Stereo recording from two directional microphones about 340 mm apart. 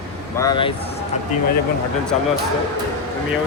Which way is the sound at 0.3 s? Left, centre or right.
Centre.